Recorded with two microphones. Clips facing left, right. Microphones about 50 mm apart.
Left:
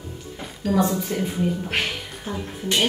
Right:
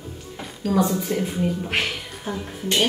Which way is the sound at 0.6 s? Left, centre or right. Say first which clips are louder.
Even; centre.